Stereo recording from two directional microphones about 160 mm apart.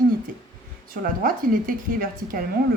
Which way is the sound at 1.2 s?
60° right (ahead or behind).